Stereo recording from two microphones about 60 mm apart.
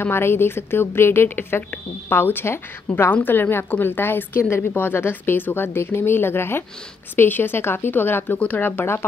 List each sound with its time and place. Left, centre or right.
0.0 s speech: left